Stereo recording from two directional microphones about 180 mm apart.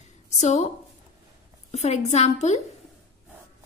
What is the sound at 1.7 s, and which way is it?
Speech, 40° left (ahead or behind).